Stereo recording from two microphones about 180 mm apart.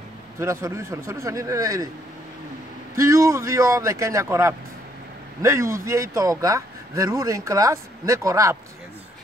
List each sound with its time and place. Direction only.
0.4 s speech: 15° right (ahead or behind)
3.0 s speech: 15° right (ahead or behind)